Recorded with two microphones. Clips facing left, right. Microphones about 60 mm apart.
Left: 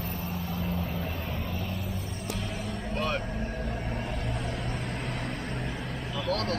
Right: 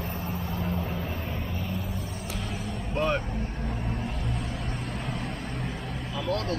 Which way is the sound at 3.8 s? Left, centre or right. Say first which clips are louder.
Right 1 dB; left.